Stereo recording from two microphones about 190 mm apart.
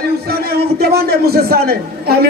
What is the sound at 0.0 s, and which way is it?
A man's voice, 55° right (ahead or behind).